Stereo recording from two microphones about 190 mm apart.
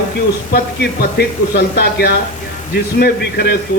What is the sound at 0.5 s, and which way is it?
A man's voice, 55° left (ahead or behind).